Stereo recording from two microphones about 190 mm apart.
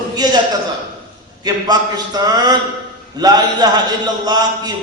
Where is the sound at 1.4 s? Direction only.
20° right (ahead or behind).